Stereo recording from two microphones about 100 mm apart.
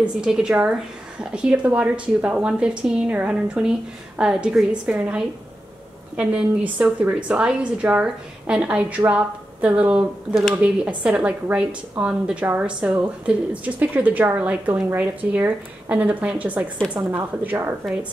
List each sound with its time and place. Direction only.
0.0 s a woman's voice: 10° right (ahead or behind)
17.0 s a woman's voice: 25° right (ahead or behind)